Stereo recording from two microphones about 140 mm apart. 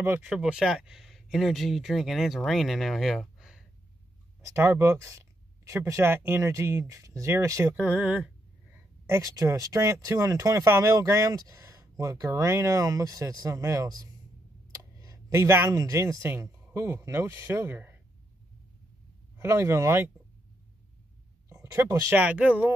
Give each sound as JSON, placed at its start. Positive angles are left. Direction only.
{"t": 0.0, "sound": "speech", "side_deg": -10}
{"t": 4.4, "sound": "speech", "side_deg": -20}
{"t": 9.3, "sound": "speech", "side_deg": -25}
{"t": 19.3, "sound": "speech", "side_deg": -20}
{"t": 21.7, "sound": "speech", "side_deg": -15}